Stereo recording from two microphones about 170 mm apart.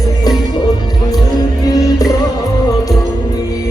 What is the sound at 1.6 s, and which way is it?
Music, 20° left (ahead or behind).